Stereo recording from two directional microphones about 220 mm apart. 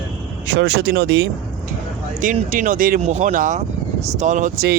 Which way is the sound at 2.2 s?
35° right (ahead or behind).